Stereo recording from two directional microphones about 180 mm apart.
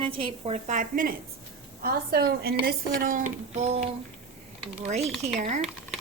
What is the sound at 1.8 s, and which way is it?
A woman's voice, 60° right (ahead or behind).